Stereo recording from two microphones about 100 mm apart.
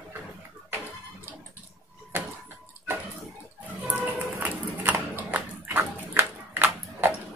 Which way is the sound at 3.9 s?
20° right (ahead or behind).